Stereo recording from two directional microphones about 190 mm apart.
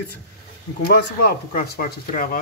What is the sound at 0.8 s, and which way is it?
Speech, 50° left (ahead or behind).